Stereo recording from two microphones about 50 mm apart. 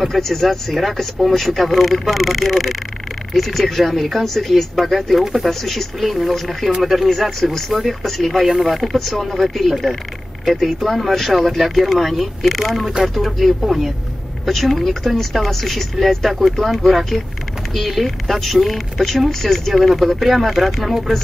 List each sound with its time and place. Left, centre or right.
0.0 s speech: centre
5.5 s speech: centre
7.1 s speech: centre